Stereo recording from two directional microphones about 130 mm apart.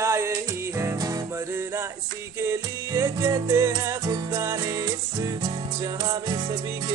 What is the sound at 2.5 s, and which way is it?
Music, 25° right (ahead or behind).